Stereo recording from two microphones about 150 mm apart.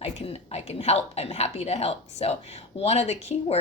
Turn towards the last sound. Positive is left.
turn(degrees=45)  # may be behind; listen again after turning